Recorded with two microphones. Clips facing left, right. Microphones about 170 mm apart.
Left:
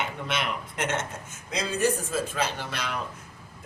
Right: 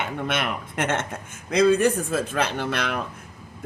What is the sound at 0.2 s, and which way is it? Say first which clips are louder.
Speech: right 4 dB; 55° right (ahead or behind).